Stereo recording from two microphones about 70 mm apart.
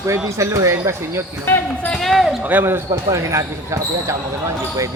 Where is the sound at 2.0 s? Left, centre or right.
Centre.